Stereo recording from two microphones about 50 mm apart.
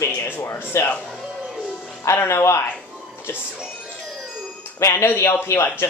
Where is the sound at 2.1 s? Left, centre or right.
Left.